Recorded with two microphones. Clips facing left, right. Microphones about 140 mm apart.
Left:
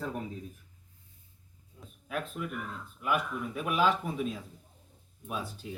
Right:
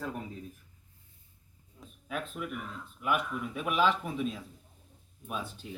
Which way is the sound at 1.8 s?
Centre (ahead or behind).